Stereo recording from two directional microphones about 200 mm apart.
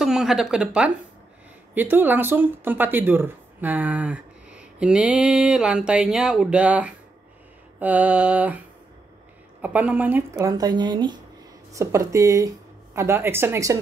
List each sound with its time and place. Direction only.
0.0 s speech: centre (ahead or behind)